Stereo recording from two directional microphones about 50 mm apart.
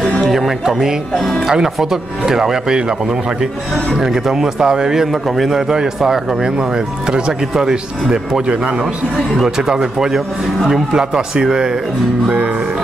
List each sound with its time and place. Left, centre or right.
0.2 s speech: centre; by 9.2 s right
9.4 s speech: centre